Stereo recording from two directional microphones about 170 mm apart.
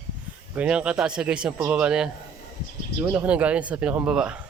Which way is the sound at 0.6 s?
5° right (ahead or behind).